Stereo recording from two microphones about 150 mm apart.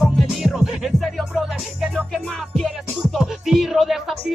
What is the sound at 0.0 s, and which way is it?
Music, centre (ahead or behind).